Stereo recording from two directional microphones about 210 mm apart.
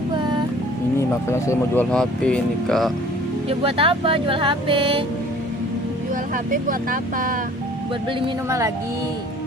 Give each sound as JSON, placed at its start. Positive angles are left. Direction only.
{"t": 0.9, "sound": "speech", "side_deg": 15}
{"t": 3.6, "sound": "speech", "side_deg": -25}
{"t": 6.3, "sound": "speech", "side_deg": -40}
{"t": 8.4, "sound": "speech", "side_deg": -15}